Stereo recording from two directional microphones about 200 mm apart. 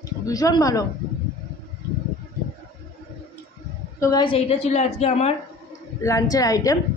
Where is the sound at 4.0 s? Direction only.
20° left (ahead or behind).